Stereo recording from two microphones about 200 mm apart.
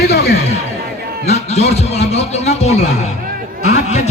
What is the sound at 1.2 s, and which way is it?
Speech, 35° left (ahead or behind).